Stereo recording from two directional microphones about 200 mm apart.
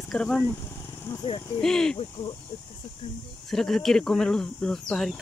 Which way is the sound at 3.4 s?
Centre (ahead or behind).